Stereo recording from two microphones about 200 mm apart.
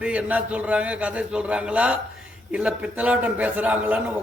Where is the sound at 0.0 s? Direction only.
5° right (ahead or behind).